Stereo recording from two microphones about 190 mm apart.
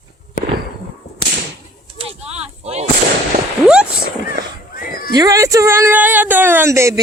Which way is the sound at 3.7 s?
5° right (ahead or behind).